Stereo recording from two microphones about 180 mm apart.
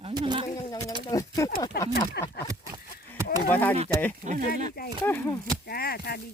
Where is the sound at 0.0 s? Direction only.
25° right (ahead or behind).